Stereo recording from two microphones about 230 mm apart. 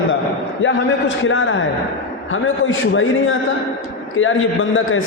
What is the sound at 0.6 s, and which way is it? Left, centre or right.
A man's voice, left.